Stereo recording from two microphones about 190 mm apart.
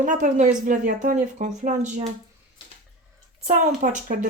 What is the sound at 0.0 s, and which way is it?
Speech, 40° right (ahead or behind).